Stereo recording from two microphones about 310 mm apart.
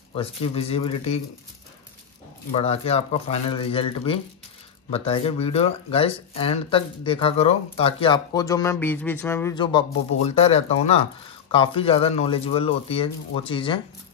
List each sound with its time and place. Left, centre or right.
0.1 s speech: centre
2.5 s speech: centre